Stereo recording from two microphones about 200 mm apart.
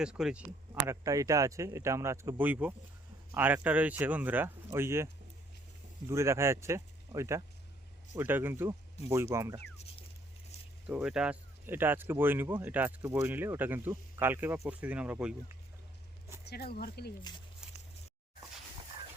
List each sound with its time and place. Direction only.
0.0 s speech: 5° right (ahead or behind)
0.7 s speech: 15° right (ahead or behind)
6.1 s speech: 15° right (ahead or behind)
10.8 s speech: 5° right (ahead or behind)
16.4 s speech: 50° left (ahead or behind)
17.6 s a sound: 5° right (ahead or behind)